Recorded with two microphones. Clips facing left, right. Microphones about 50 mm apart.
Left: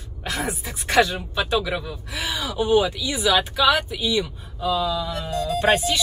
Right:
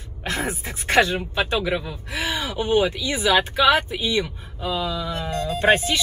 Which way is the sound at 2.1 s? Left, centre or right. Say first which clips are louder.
Even; right.